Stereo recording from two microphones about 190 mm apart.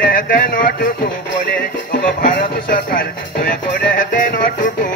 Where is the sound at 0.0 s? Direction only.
45° left (ahead or behind).